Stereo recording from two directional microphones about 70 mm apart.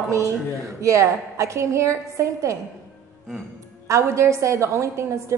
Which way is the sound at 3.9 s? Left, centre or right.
Right.